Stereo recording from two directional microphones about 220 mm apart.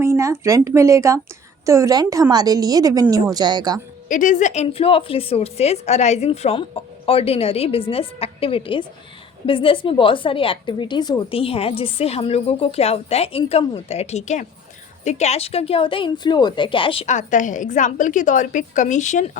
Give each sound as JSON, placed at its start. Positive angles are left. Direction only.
{"t": 0.0, "sound": "a woman's voice", "side_deg": -10}
{"t": 4.1, "sound": "a woman's voice", "side_deg": 35}